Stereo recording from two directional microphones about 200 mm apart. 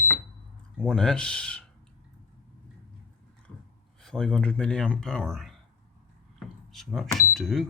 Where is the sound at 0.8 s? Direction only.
5° left (ahead or behind).